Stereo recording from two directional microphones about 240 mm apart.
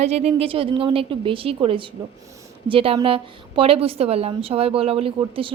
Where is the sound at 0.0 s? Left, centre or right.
Right.